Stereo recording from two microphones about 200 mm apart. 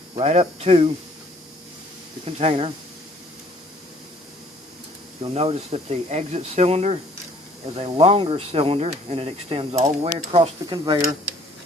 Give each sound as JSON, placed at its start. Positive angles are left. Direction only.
{"t": 0.2, "sound": "speech", "side_deg": -30}
{"t": 2.2, "sound": "speech", "side_deg": -30}
{"t": 5.2, "sound": "speech", "side_deg": -30}